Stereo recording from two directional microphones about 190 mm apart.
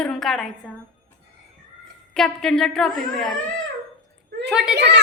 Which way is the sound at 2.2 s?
5° left (ahead or behind).